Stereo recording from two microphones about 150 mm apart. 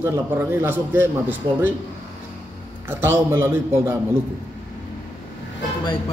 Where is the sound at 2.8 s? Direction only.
15° right (ahead or behind).